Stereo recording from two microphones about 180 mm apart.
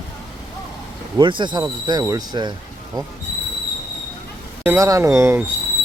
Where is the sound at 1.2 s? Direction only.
25° right (ahead or behind).